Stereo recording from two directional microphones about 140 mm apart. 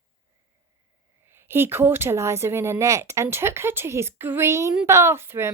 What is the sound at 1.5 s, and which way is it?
A woman's voice, 15° right (ahead or behind).